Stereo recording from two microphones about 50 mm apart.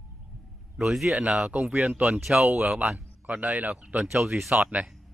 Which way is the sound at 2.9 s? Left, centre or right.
Right.